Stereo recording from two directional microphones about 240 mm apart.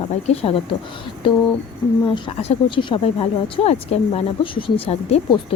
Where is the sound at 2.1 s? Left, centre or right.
Left.